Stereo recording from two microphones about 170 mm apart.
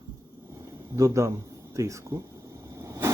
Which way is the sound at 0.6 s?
15° right (ahead or behind).